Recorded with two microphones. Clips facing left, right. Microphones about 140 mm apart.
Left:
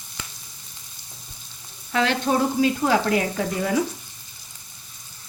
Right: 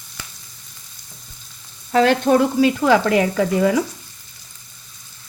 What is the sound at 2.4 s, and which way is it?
Frying, 85° right.